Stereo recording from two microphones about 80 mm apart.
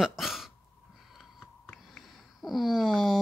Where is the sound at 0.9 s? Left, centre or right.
Centre.